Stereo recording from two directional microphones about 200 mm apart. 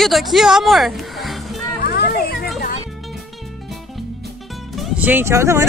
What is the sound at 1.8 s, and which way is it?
Children playing, 50° left (ahead or behind).